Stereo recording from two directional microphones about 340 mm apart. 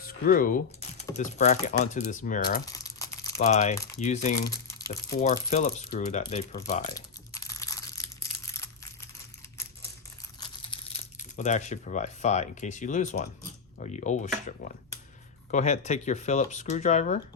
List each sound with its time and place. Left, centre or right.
0.0 s a sound: left
1.1 s speech: centre
2.6 s crumpling: centre
3.3 s speech: left
7.3 s crushing: centre
10.7 s speech: centre